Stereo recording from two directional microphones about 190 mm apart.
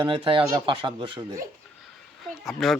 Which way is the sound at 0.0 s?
25° right (ahead or behind).